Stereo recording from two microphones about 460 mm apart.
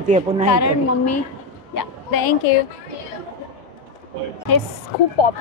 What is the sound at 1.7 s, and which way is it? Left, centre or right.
Speech, left.